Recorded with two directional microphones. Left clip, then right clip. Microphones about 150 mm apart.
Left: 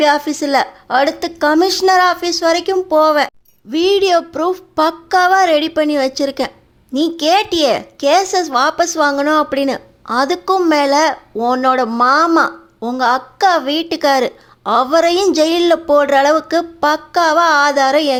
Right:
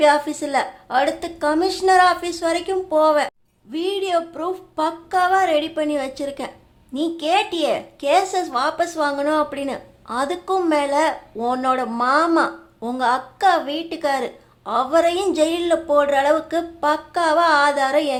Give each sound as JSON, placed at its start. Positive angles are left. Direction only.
{"t": 0.0, "sound": "a woman's voice", "side_deg": 35}